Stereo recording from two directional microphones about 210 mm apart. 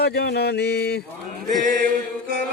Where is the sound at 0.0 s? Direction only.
50° left (ahead or behind).